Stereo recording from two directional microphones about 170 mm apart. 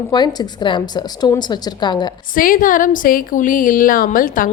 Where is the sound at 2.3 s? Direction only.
55° left (ahead or behind).